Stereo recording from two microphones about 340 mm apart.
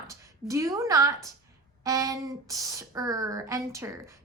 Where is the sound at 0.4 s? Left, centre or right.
Centre.